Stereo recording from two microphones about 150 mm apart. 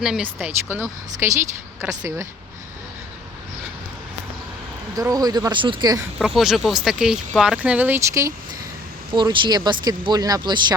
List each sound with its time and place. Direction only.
0.0 s speech: 5° right (ahead or behind); by 2.2 s 20° right (ahead or behind)
4.9 s speech: 25° right (ahead or behind)
6.1 s speech: centre (ahead or behind); by 8.3 s 20° right (ahead or behind)
9.1 s speech: 30° right (ahead or behind)